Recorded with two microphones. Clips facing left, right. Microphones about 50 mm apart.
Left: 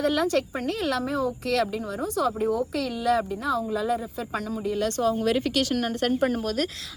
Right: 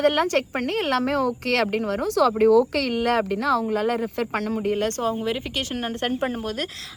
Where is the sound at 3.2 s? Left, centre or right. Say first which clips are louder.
Right 5 dB; right.